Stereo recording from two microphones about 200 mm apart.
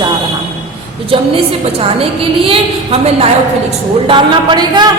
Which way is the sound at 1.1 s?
25° right (ahead or behind).